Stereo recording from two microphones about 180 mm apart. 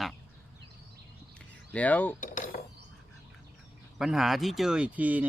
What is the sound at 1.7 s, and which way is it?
Speech, 10° left (ahead or behind).